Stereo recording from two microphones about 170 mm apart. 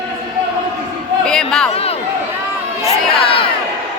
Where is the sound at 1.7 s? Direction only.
35° left (ahead or behind).